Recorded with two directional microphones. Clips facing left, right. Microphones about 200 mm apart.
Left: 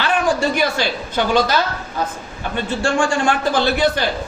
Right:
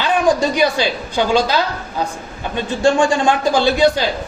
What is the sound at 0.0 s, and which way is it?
A woman's voice, 15° right (ahead or behind).